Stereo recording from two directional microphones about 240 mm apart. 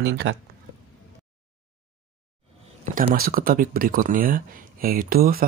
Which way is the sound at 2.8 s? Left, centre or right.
Right.